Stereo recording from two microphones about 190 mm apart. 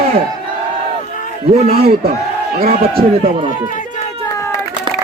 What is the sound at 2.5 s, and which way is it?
Speech, 50° right (ahead or behind).